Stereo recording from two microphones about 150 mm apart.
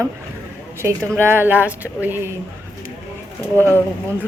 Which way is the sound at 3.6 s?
15° right (ahead or behind).